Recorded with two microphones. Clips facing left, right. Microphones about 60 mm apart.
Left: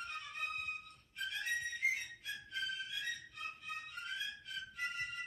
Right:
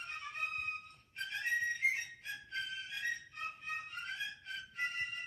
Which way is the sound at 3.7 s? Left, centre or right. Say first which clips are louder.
Right 1 dB; right.